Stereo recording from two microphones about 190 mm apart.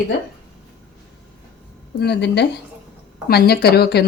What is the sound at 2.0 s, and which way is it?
Speech, 60° left (ahead or behind).